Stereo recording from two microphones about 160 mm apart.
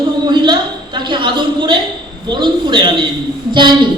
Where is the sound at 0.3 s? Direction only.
25° right (ahead or behind).